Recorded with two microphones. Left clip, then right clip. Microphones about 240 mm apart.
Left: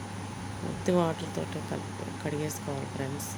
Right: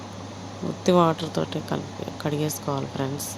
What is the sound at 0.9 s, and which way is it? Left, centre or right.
Speech, centre.